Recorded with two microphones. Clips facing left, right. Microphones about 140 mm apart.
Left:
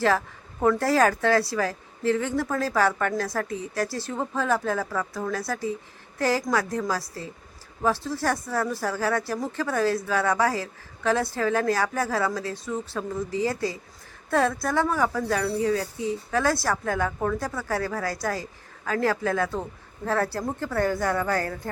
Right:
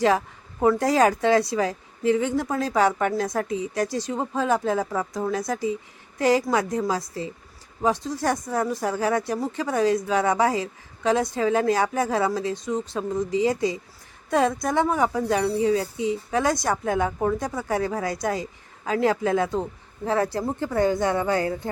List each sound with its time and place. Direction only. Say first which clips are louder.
0.6 s a woman's voice: right 2 dB; 15° right (ahead or behind)